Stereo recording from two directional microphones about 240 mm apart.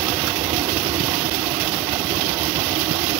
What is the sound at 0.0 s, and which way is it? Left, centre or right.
Vehicle, centre.